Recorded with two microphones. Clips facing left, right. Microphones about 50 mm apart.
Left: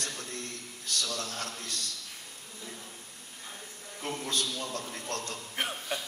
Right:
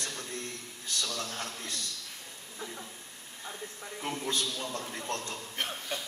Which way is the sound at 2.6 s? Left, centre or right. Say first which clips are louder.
Right 4 dB; right.